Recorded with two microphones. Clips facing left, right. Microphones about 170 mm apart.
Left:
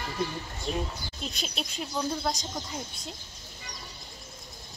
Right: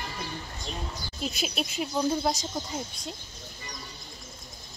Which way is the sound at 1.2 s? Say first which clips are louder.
Right 5 dB; 5° right (ahead or behind).